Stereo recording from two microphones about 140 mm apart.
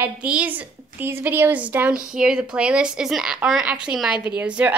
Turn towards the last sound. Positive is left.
turn(degrees=-10)  # may be behind; listen again after turning